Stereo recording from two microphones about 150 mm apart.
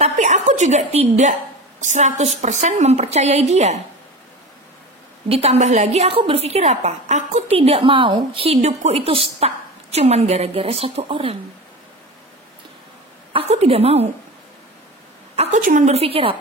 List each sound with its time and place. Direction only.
0.0 s a sound: 50° right (ahead or behind)
1.8 s a woman's voice: 55° right (ahead or behind)
5.3 s a woman's voice: 45° right (ahead or behind)
13.3 s a woman's voice: 40° right (ahead or behind)
15.3 s a woman's voice: 45° right (ahead or behind)